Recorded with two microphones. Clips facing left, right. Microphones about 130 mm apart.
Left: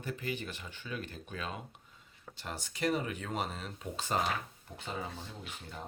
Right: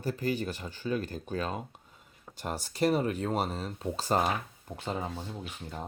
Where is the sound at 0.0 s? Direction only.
40° right (ahead or behind).